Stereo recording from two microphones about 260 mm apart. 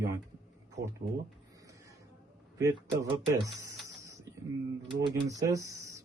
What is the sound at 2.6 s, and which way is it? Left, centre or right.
Speech, centre.